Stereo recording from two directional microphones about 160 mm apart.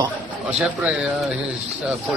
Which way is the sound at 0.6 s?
Centre (ahead or behind).